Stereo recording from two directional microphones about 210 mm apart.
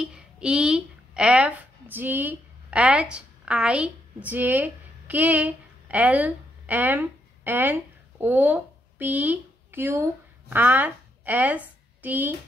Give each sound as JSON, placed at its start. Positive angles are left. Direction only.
{"t": 0.0, "sound": "speech", "side_deg": -5}